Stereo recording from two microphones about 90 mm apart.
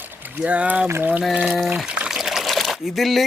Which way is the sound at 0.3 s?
15° right (ahead or behind).